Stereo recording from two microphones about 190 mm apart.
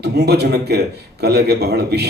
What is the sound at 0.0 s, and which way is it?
Speech, 60° right (ahead or behind).